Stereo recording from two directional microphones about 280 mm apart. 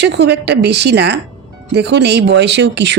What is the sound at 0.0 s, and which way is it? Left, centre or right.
Speech, right.